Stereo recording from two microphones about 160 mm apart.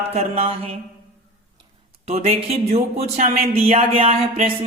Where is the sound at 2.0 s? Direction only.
40° right (ahead or behind).